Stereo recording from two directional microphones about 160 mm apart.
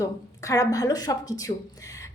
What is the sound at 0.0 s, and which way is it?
A woman's voice, 20° left (ahead or behind).